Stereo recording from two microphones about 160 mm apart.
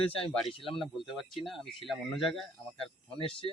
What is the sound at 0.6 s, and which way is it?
Speech, 30° left (ahead or behind).